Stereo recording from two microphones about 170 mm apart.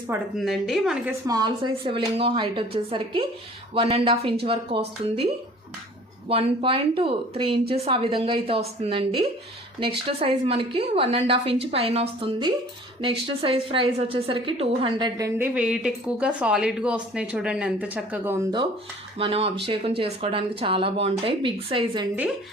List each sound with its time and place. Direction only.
0.3 s a woman's voice: centre (ahead or behind)
1.3 s speech: 25° right (ahead or behind)
6.2 s speech: 35° right (ahead or behind)
15.4 s speech: 5° right (ahead or behind)
19.2 s speech: 35° right (ahead or behind)